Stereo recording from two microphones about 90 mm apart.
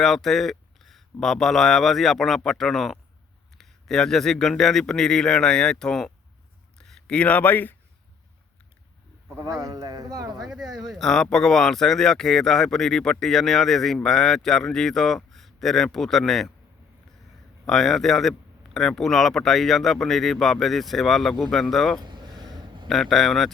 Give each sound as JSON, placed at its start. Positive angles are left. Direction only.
{"t": 0.0, "sound": "speech", "side_deg": 5}
{"t": 9.4, "sound": "speech", "side_deg": -40}
{"t": 10.4, "sound": "speech", "side_deg": -5}
{"t": 17.7, "sound": "speech", "side_deg": 5}
{"t": 22.0, "sound": "a sound", "side_deg": -55}
{"t": 22.9, "sound": "speech", "side_deg": 5}